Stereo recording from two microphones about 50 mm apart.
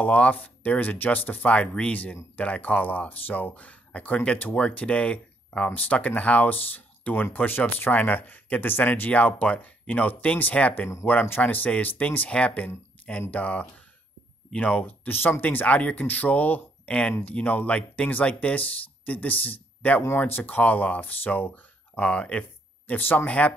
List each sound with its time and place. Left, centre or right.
0.0 s speech: left
1.5 s speech: left
5.7 s speech: left
12.3 s speech: left
15.0 s speech: left
15.6 s speech: left
21.9 s speech: left
22.8 s speech: left
23.1 s speech: left